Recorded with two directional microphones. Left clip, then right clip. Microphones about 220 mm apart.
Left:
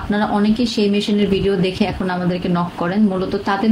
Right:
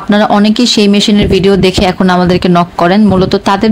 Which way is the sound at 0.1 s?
50° right (ahead or behind).